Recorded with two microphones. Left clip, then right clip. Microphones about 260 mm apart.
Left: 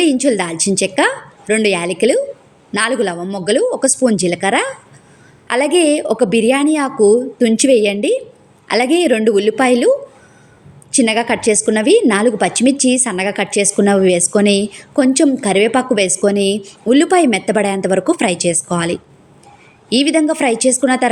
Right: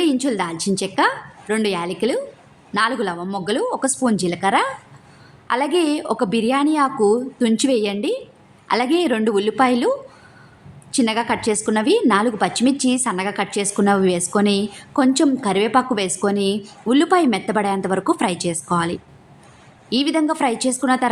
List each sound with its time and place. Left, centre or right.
0.0 s a woman's voice: centre
10.9 s a woman's voice: centre